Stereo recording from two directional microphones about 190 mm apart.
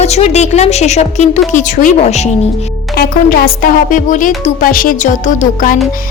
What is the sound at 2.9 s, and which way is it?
Speech, 55° left (ahead or behind).